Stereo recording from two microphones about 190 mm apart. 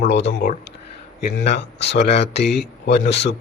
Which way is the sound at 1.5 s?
65° left (ahead or behind).